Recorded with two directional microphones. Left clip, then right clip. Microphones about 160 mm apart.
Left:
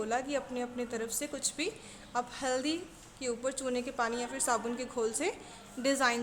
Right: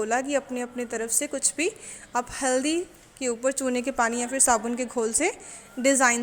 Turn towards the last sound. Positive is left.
turn(degrees=-35)  # may be behind; listen again after turning